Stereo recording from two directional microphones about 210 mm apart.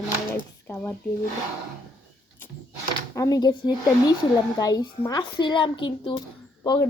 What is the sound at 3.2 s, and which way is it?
Speech, 15° left (ahead or behind).